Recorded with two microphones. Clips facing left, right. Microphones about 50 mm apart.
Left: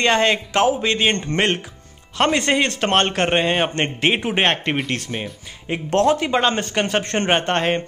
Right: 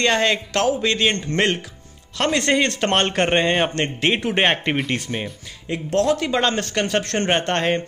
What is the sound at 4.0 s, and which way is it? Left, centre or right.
Speech, centre.